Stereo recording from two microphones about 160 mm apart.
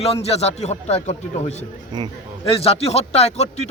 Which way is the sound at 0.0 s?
40° left (ahead or behind).